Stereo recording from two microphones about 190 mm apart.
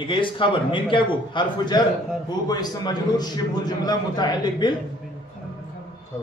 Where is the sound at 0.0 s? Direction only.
25° left (ahead or behind).